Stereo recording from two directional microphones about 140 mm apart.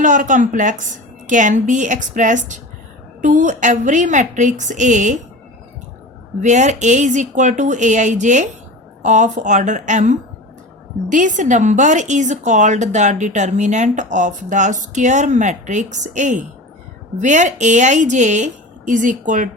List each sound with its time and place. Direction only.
0.0 s a woman's voice: 65° right (ahead or behind)
6.4 s a woman's voice: 60° right (ahead or behind)